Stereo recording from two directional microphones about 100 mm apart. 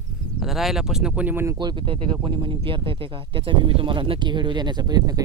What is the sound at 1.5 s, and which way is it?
Speech, 55° right (ahead or behind).